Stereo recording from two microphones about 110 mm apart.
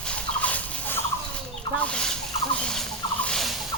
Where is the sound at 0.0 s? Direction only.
10° left (ahead or behind).